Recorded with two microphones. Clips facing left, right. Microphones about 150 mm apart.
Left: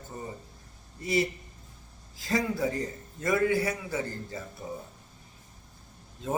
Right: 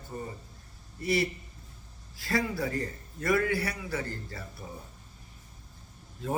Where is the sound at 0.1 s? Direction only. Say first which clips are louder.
Right 2 dB; 20° left (ahead or behind).